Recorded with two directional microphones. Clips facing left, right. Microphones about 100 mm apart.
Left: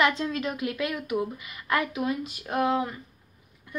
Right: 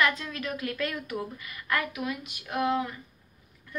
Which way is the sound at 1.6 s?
25° left (ahead or behind).